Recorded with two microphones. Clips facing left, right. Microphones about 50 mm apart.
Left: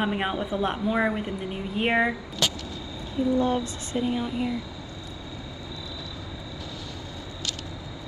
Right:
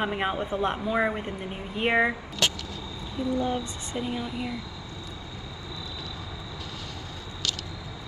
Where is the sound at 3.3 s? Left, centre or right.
Left.